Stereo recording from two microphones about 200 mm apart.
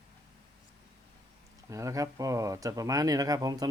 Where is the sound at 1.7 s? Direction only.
15° right (ahead or behind).